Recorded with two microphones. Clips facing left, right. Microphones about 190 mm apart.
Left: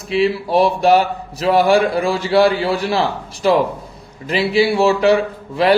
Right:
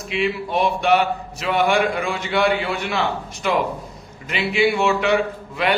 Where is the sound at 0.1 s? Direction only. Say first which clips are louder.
Left 6 dB; 35° left (ahead or behind).